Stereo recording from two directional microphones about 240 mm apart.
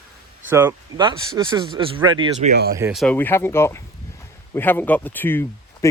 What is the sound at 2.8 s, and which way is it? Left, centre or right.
Speech, centre.